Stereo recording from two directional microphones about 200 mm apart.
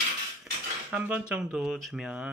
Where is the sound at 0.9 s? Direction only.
5° right (ahead or behind).